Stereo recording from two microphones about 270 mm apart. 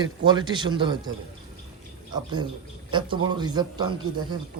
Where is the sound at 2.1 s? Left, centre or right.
Centre.